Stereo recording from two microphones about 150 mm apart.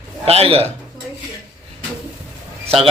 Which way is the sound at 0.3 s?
40° right (ahead or behind).